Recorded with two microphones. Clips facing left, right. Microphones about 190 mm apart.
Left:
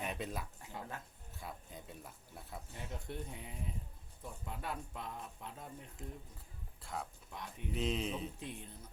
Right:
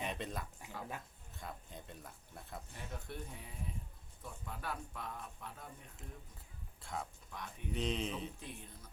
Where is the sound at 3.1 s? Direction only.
20° left (ahead or behind).